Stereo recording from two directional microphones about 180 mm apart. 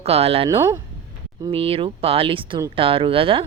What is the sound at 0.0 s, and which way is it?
Speech, 35° right (ahead or behind).